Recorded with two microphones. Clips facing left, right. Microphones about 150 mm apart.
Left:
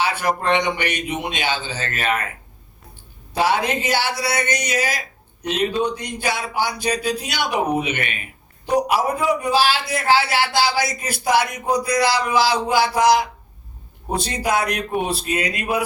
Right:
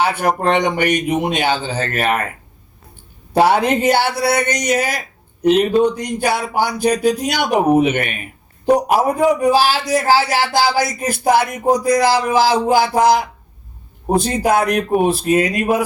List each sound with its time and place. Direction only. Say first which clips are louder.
0.0 s speech: right 5 dB; 55° right (ahead or behind)
3.3 s speech: right 6 dB; 55° right (ahead or behind)